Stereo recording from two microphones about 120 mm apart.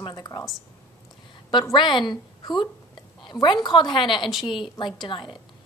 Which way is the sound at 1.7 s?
40° left (ahead or behind).